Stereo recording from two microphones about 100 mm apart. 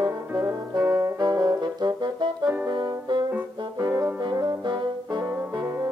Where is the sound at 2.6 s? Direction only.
40° right (ahead or behind).